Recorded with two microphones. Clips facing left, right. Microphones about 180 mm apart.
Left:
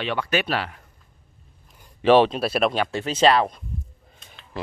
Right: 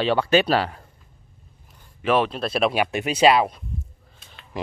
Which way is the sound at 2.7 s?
15° right (ahead or behind).